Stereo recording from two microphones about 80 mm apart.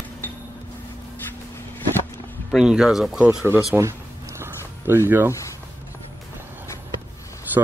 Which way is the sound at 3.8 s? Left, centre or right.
Right.